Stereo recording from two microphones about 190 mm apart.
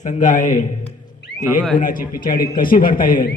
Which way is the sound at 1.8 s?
45° left (ahead or behind).